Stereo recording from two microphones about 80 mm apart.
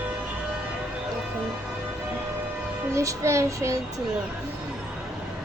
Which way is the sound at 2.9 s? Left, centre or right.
Right.